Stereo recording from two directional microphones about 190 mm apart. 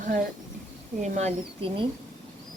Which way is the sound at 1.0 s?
35° right (ahead or behind).